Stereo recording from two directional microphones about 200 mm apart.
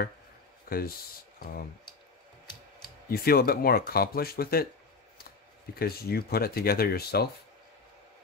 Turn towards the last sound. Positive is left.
turn(degrees=50)  # may be behind; listen again after turning